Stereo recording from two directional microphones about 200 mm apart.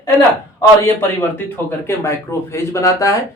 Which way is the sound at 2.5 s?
15° left (ahead or behind).